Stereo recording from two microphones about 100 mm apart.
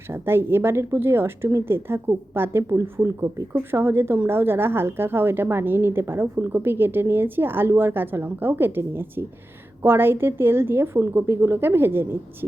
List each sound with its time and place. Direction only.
0.1 s a woman's voice: 25° right (ahead or behind)